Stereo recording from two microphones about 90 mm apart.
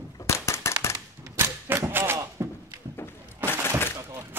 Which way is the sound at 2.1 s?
35° right (ahead or behind).